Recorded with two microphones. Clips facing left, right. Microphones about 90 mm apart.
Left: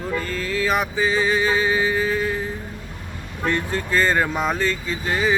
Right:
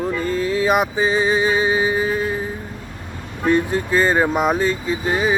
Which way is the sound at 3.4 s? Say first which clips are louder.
Right 6 dB; 15° right (ahead or behind).